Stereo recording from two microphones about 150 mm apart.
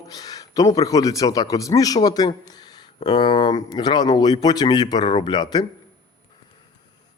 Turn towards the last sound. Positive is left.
turn(degrees=30)  # may be behind; listen again after turning